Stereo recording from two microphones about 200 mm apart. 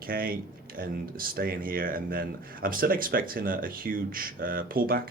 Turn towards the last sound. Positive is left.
turn(degrees=-45)  # may be behind; listen again after turning